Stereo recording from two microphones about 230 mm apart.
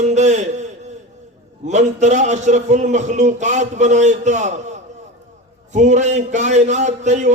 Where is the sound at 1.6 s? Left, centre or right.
Right.